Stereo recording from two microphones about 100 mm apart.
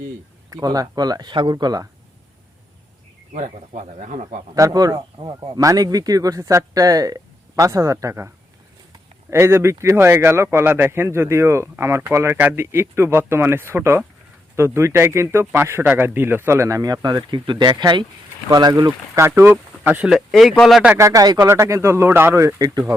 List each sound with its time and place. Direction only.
0.5 s speech: 40° right (ahead or behind)
4.5 s speech: 40° right (ahead or behind)
9.3 s speech: 25° right (ahead or behind)
19.4 s speech: 20° right (ahead or behind)
20.1 s speech: centre (ahead or behind)
20.9 s speech: 30° right (ahead or behind)
21.4 s speech: 25° right (ahead or behind)